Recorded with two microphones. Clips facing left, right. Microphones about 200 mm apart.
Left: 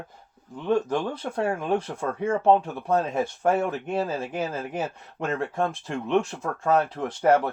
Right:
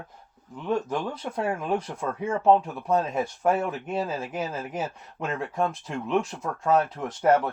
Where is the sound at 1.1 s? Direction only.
30° left (ahead or behind).